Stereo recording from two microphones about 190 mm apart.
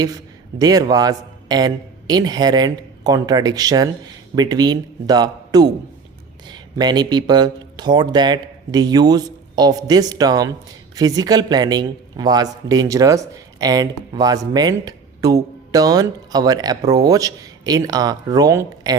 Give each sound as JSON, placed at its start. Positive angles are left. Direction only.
{"t": 0.6, "sound": "speech", "side_deg": -20}